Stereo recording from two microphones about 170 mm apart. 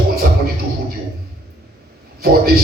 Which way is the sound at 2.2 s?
65° right (ahead or behind).